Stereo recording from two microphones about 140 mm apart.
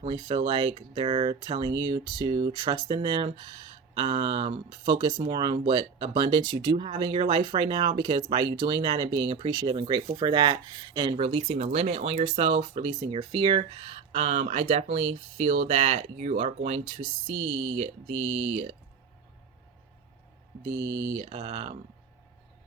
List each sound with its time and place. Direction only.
0.3 s speech: 35° right (ahead or behind); by 17.1 s 50° right (ahead or behind)
18.3 s speech: 45° right (ahead or behind)
20.7 s speech: 25° right (ahead or behind)
21.2 s speech: 40° right (ahead or behind)